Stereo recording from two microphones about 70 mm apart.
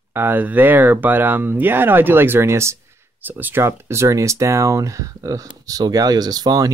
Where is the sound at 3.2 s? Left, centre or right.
Right.